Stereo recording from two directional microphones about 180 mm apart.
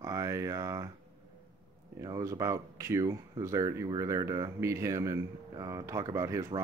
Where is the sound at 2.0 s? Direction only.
20° right (ahead or behind).